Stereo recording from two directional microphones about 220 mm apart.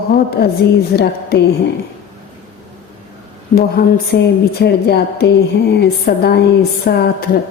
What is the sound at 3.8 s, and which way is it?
A woman's voice, 45° left (ahead or behind).